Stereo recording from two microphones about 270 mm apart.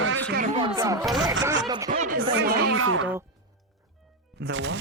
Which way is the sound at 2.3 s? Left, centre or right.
Right.